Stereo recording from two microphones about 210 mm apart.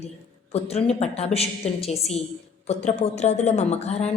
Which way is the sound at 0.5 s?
30° left (ahead or behind).